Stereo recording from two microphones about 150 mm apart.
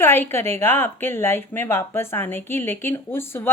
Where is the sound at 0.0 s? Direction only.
15° left (ahead or behind).